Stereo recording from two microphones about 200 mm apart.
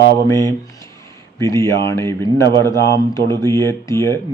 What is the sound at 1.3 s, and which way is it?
Speech, 15° left (ahead or behind).